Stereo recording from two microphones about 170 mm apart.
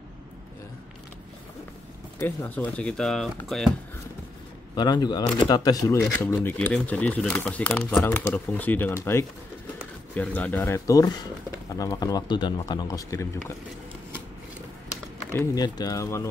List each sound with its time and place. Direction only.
2.1 s speech: 10° left (ahead or behind)
4.7 s speech: 25° left (ahead or behind)
15.3 s speech: 20° left (ahead or behind)